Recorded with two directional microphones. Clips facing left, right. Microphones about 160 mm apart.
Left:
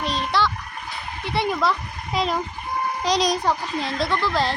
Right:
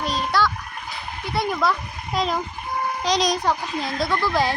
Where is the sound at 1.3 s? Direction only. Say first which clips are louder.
Even; centre (ahead or behind).